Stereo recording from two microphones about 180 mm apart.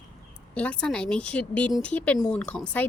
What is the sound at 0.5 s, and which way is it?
A woman's voice, 5° left (ahead or behind).